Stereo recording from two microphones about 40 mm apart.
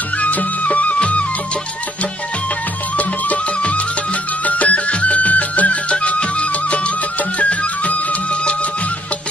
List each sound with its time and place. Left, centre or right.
0.2 s music: left
0.9 s music: left
3.0 s music: left